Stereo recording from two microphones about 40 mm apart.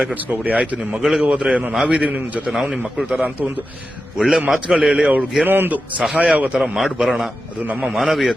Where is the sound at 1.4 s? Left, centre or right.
Right.